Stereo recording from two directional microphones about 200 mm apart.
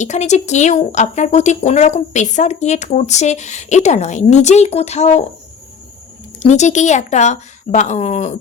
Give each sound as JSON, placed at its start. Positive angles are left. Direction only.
{"t": 0.0, "sound": "speech", "side_deg": 35}
{"t": 6.4, "sound": "speech", "side_deg": 35}